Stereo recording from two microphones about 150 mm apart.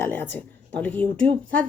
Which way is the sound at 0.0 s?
15° left (ahead or behind).